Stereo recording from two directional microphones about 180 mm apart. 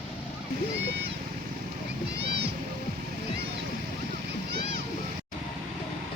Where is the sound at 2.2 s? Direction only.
70° right (ahead or behind).